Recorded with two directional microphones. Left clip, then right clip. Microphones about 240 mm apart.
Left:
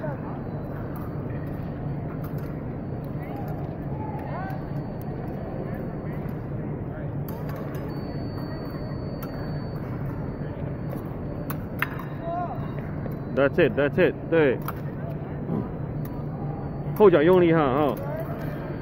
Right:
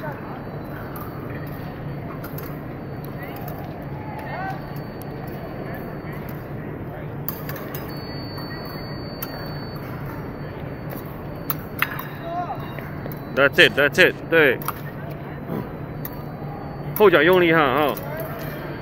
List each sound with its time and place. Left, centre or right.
13.4 s speech: centre
17.0 s speech: centre